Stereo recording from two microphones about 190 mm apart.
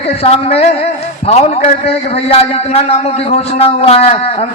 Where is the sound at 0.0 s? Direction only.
30° left (ahead or behind).